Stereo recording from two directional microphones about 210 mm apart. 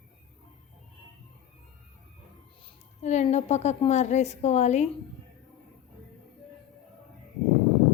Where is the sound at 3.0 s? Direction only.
35° left (ahead or behind).